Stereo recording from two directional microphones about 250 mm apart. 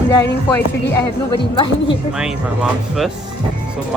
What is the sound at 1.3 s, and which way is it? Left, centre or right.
Speech, centre.